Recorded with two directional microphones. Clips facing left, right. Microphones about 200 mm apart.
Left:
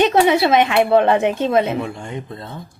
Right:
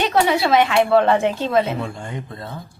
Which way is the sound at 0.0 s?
20° left (ahead or behind).